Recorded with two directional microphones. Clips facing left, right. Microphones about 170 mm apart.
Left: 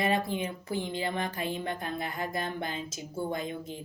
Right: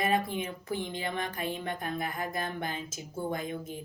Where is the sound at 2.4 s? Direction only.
45° right (ahead or behind).